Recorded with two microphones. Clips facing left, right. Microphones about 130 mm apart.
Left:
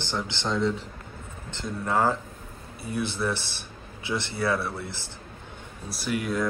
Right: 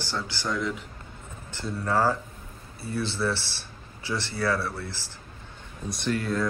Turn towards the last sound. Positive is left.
turn(degrees=10)  # may be behind; listen again after turning